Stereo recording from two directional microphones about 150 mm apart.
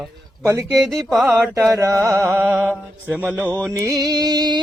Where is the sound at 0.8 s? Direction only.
Centre (ahead or behind).